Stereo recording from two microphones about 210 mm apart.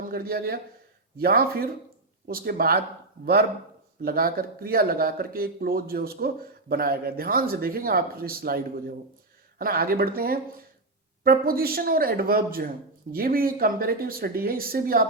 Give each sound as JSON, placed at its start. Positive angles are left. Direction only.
{"t": 0.0, "sound": "speech", "side_deg": -45}
{"t": 4.0, "sound": "speech", "side_deg": -45}